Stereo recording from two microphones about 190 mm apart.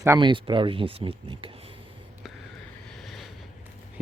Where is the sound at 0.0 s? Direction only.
20° right (ahead or behind).